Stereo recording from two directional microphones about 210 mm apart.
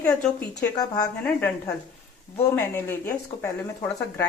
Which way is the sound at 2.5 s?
10° left (ahead or behind).